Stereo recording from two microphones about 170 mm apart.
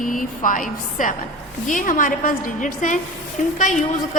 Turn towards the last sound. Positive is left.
turn(degrees=50)  # may be behind; listen again after turning